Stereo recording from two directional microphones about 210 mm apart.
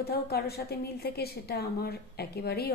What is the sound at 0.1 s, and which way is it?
A woman's voice, 50° left (ahead or behind).